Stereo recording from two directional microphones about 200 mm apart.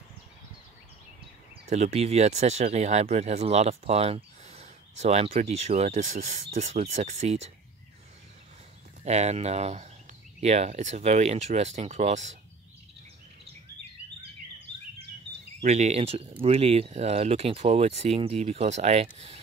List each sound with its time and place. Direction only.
1.7 s speech: 30° right (ahead or behind)
9.0 s speech: 35° right (ahead or behind)
15.6 s speech: 35° right (ahead or behind)